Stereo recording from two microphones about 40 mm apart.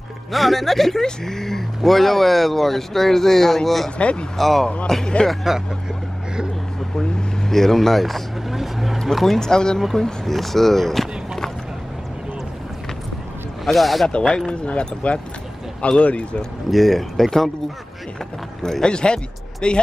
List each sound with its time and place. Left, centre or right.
0.3 s speech: centre
4.0 s speech: left
4.4 s speech: centre
5.3 s speech: centre
7.0 s speech: centre
9.4 s speech: centre
13.7 s speech: centre
14.2 s speech: centre
14.5 s a man's voice: left
16.7 s speech: centre
18.6 s speech: centre